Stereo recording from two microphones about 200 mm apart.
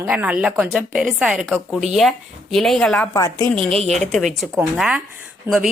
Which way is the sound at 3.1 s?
20° left (ahead or behind).